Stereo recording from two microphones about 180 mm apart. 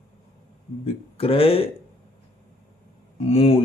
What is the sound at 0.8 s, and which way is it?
Speech, 30° left (ahead or behind).